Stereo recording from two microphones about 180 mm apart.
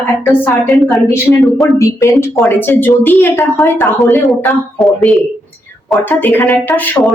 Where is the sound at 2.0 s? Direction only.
15° left (ahead or behind).